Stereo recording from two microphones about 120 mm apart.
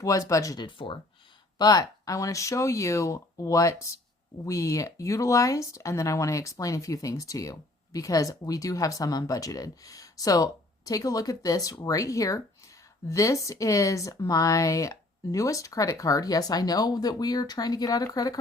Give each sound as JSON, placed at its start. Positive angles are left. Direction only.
{"t": 0.0, "sound": "speech", "side_deg": 25}